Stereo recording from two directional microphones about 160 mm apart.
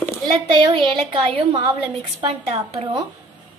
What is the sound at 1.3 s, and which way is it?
A woman's voice, 35° right (ahead or behind).